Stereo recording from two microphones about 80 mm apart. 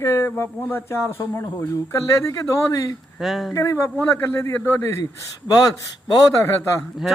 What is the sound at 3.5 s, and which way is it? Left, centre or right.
A man's voice, left.